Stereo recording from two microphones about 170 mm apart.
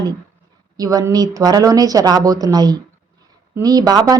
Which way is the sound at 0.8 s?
20° right (ahead or behind).